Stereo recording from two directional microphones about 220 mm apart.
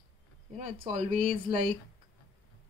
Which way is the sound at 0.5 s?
35° right (ahead or behind).